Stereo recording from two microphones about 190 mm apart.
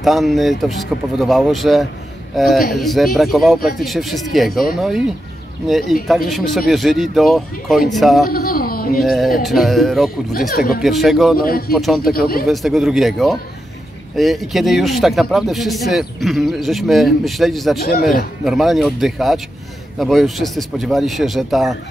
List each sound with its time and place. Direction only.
0.0 s a man's voice: centre (ahead or behind)
5.7 s a man's voice: centre (ahead or behind)
8.3 s speech: 50° left (ahead or behind)
9.0 s a man's voice: centre (ahead or behind)
10.5 s a man's voice: 50° left (ahead or behind)
10.8 s a man's voice: centre (ahead or behind)
11.3 s a man's voice: 50° left (ahead or behind)
11.7 s a man's voice: centre (ahead or behind)
17.7 s a man's voice: 55° left (ahead or behind)
18.4 s a man's voice: centre (ahead or behind)